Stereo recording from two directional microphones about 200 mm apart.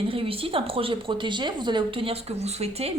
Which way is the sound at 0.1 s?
25° right (ahead or behind).